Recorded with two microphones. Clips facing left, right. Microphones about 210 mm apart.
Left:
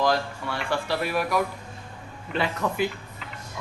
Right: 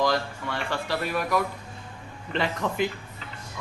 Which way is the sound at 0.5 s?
10° left (ahead or behind).